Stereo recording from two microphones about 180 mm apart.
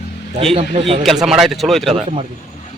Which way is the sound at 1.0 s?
Centre (ahead or behind).